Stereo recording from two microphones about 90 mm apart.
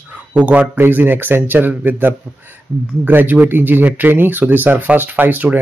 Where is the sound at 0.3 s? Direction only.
15° right (ahead or behind).